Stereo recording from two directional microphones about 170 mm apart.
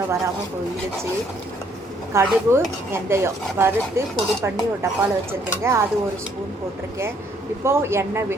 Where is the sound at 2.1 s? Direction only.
15° right (ahead or behind).